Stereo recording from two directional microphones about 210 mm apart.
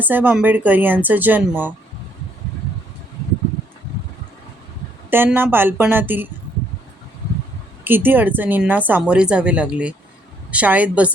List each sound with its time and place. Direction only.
0.0 s speech: 10° right (ahead or behind)
5.1 s speech: 10° right (ahead or behind)
7.9 s speech: 10° right (ahead or behind)